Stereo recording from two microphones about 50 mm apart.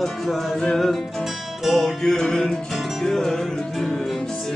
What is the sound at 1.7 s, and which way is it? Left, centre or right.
Music, centre.